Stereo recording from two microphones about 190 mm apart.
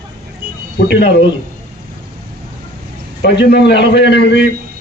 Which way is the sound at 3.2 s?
65° left (ahead or behind).